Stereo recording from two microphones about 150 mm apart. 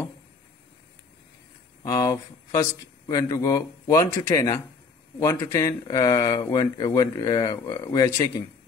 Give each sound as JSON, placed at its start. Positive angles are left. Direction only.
{"t": 1.8, "sound": "speech", "side_deg": 20}